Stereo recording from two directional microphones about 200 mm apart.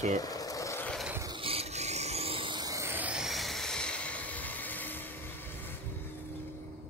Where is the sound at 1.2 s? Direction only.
25° right (ahead or behind); by 5.7 s 10° left (ahead or behind).